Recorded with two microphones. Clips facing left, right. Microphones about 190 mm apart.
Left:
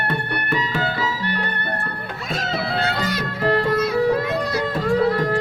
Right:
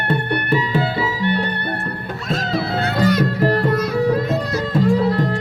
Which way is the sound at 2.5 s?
50° right (ahead or behind).